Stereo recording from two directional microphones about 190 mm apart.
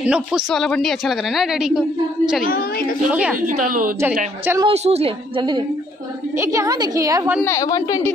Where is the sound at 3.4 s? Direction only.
45° right (ahead or behind).